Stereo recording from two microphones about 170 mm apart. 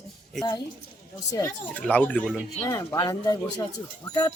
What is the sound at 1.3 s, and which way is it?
Speech, 10° left (ahead or behind).